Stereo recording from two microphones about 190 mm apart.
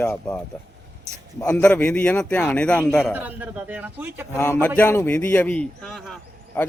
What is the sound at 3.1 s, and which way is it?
A man's voice, 10° right (ahead or behind).